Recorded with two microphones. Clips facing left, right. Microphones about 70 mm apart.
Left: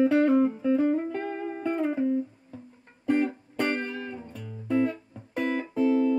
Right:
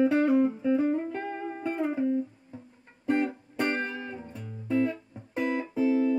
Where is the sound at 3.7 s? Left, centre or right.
Centre.